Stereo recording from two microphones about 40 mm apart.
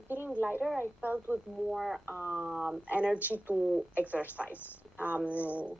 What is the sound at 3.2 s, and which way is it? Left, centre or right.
Speech, right.